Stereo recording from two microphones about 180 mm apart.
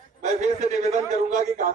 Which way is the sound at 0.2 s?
40° right (ahead or behind).